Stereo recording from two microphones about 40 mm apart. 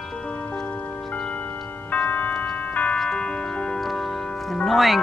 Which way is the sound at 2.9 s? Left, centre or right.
Centre.